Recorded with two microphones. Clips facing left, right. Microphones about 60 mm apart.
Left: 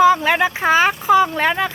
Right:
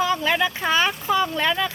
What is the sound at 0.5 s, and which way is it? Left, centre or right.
Speech, left.